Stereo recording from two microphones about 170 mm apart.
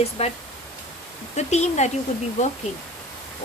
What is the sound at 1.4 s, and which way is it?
Speech, 40° left (ahead or behind).